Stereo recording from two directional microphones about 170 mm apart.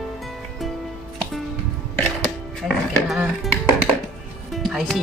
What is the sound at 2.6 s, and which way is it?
Music, 5° right (ahead or behind).